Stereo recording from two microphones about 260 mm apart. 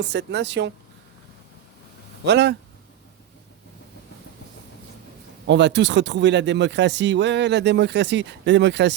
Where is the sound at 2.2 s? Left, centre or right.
Right.